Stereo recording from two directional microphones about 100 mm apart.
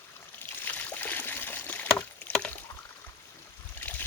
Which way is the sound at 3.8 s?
20° left (ahead or behind).